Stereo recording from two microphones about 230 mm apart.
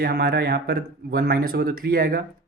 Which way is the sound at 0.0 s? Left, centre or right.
Right.